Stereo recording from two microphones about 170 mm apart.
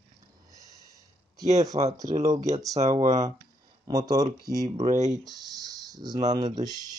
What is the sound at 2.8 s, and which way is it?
Speech, 45° right (ahead or behind).